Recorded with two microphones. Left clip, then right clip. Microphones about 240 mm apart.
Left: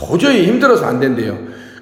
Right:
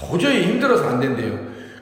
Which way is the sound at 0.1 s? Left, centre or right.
Left.